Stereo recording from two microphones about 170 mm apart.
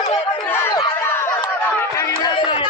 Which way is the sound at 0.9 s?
15° left (ahead or behind).